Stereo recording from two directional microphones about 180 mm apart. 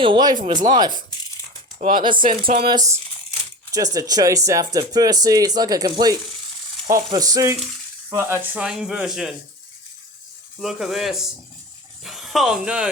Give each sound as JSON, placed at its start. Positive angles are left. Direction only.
{"t": 0.0, "sound": "speech", "side_deg": -25}
{"t": 10.6, "sound": "speech", "side_deg": 0}